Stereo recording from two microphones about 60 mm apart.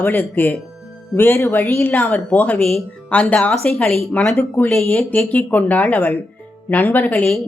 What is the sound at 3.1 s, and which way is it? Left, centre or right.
Speech, left.